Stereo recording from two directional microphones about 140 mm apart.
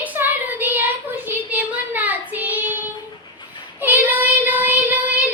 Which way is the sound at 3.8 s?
15° right (ahead or behind).